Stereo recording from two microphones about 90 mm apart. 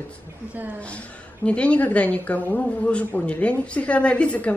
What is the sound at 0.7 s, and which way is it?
A woman's voice, 15° left (ahead or behind).